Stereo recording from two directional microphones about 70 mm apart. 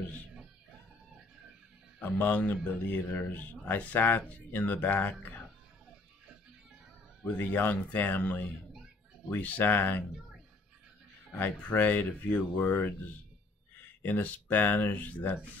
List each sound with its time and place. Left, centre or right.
2.0 s speech: left
7.2 s speech: left
11.3 s speech: left
12.6 s speech: left
14.0 s speech: left